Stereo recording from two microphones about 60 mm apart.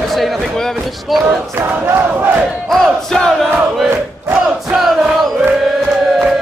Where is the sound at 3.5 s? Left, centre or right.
Centre.